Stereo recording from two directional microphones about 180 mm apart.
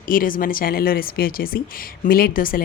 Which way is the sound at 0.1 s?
50° left (ahead or behind).